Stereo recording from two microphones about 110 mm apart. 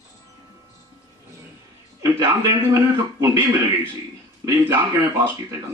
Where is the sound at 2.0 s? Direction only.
30° right (ahead or behind).